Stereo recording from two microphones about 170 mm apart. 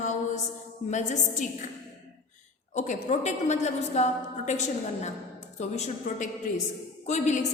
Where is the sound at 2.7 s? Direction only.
45° left (ahead or behind).